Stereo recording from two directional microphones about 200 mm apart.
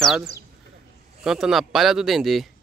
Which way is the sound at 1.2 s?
Centre (ahead or behind).